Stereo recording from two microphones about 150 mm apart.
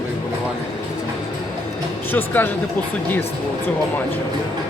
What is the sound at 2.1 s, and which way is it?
Speech, 15° left (ahead or behind).